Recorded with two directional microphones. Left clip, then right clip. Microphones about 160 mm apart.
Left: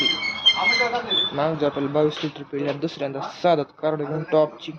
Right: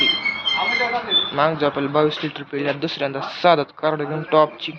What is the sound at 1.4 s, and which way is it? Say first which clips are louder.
Speech: right 4 dB; 5° left (ahead or behind).